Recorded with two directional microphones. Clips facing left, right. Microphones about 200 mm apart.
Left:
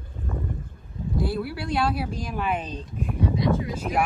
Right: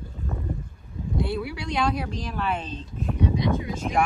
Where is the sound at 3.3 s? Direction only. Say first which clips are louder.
Left 1 dB; 20° right (ahead or behind).